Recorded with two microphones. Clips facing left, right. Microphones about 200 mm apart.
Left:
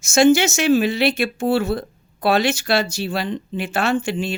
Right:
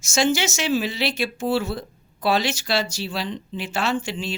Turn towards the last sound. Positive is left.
turn(degrees=55)  # may be behind; listen again after turning